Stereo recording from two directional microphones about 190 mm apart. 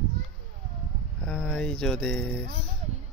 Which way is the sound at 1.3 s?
5° left (ahead or behind).